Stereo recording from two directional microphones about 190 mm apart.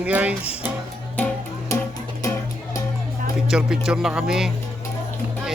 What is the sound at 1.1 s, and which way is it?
Music, 5° left (ahead or behind).